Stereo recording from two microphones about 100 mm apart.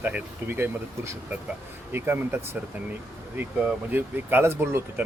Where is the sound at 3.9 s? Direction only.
20° right (ahead or behind).